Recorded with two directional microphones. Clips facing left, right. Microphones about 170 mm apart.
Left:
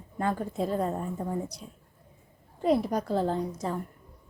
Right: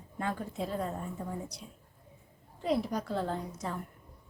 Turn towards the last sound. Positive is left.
turn(degrees=30)  # may be behind; listen again after turning